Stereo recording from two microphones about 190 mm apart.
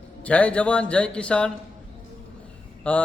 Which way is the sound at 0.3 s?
5° left (ahead or behind).